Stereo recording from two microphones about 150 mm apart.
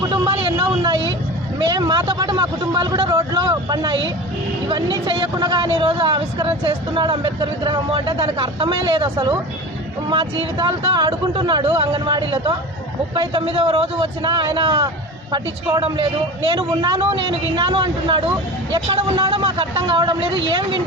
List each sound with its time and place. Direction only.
0.1 s vehicle: 30° right (ahead or behind)
1.5 s speech: 30° right (ahead or behind)